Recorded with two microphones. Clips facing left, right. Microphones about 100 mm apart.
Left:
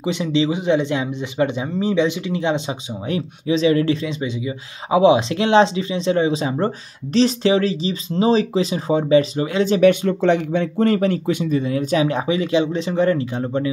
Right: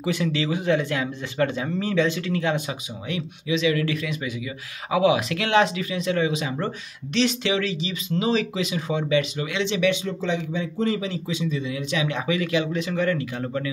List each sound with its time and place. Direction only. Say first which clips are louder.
0.0 s speech: left 5 dB; 20° left (ahead or behind)
3.1 s speech: left 5 dB; 35° left (ahead or behind)